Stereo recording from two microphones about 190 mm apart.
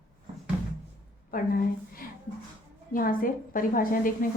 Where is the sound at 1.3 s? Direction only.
50° left (ahead or behind).